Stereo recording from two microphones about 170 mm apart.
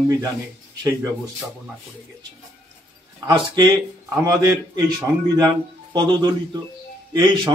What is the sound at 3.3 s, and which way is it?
A man's voice, 25° right (ahead or behind).